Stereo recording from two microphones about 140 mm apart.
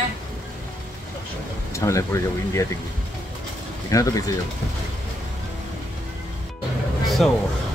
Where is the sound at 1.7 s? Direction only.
20° left (ahead or behind).